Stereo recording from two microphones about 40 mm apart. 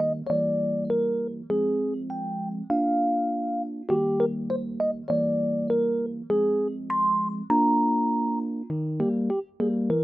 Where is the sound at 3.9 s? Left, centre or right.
Centre.